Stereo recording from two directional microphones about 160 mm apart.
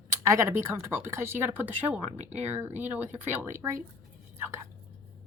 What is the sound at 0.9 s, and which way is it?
Gasp, 15° right (ahead or behind).